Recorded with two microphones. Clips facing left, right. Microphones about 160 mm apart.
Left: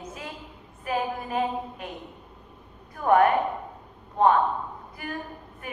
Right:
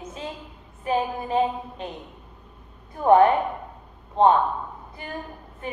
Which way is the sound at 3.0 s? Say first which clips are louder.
Right 3 dB; 25° right (ahead or behind).